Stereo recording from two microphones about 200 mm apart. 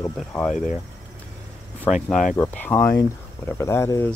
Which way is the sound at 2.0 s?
Centre (ahead or behind).